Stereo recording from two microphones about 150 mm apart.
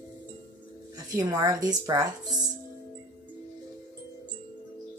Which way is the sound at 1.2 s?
25° right (ahead or behind).